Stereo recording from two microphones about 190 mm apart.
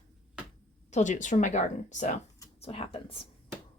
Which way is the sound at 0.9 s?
40° left (ahead or behind).